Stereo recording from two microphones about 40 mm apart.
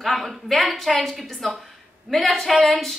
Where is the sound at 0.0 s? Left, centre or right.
Centre.